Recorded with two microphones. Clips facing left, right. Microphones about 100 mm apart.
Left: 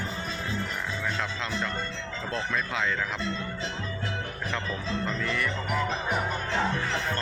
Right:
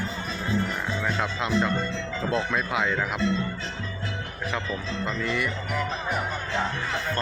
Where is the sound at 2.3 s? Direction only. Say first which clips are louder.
Right 4 dB; 15° right (ahead or behind).